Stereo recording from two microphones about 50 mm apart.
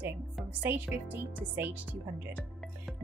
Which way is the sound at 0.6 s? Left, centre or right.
Right.